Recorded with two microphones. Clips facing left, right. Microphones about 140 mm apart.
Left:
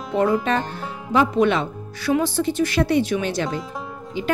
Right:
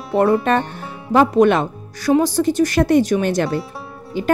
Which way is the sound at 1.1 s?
50° right (ahead or behind).